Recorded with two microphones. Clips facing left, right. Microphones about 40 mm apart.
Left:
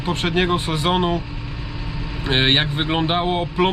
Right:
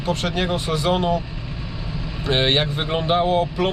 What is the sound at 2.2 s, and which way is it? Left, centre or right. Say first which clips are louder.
Speech: left 1 dB; left.